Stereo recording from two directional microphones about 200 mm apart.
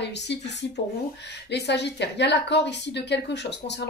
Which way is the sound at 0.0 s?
60° left (ahead or behind).